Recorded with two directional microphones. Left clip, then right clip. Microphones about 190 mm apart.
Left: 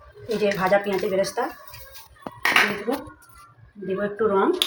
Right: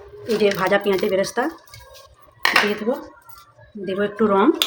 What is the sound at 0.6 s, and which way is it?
Speech, 50° right (ahead or behind).